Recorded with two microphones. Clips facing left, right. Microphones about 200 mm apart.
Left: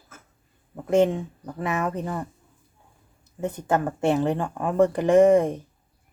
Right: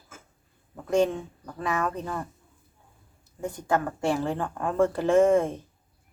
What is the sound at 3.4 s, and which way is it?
Speech, 25° left (ahead or behind).